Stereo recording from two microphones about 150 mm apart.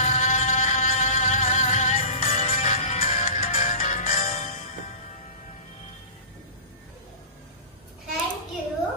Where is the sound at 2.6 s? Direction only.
55° left (ahead or behind).